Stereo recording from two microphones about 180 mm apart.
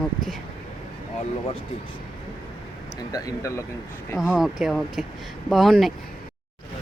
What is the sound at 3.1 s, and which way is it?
Speech, 20° left (ahead or behind).